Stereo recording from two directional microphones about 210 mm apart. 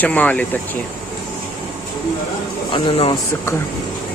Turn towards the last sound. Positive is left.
turn(degrees=25)  # may be behind; listen again after turning